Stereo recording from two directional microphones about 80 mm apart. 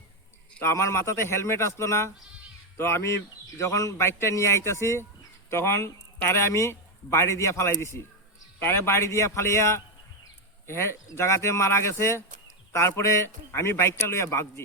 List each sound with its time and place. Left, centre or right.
0.6 s a man's voice: left